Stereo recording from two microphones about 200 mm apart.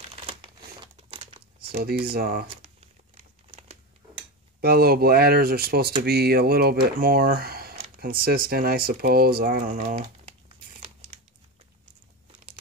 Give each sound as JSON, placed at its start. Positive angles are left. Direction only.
{"t": 0.9, "sound": "crumpling", "side_deg": -30}
{"t": 1.6, "sound": "speech", "side_deg": -50}
{"t": 4.6, "sound": "speech", "side_deg": -50}